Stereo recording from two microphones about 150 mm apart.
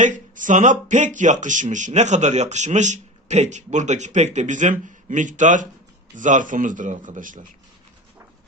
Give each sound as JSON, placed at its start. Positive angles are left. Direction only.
{"t": 0.0, "sound": "a man's voice", "side_deg": -60}